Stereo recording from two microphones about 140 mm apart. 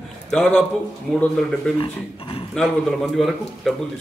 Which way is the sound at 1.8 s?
40° left (ahead or behind).